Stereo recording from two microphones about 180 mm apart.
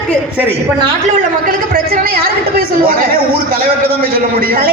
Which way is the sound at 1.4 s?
50° right (ahead or behind).